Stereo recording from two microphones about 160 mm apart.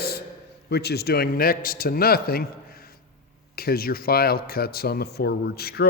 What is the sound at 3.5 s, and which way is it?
A man's voice, 70° left (ahead or behind).